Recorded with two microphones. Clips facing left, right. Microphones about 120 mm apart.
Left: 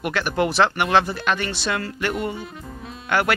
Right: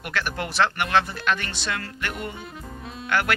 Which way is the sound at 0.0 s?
20° left (ahead or behind).